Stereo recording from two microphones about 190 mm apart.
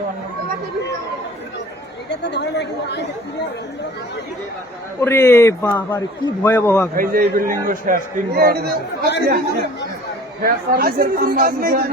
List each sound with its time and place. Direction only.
2.3 s a woman's voice: 60° left (ahead or behind)
4.9 s a man's voice: 15° left (ahead or behind)
6.9 s speech: 50° right (ahead or behind)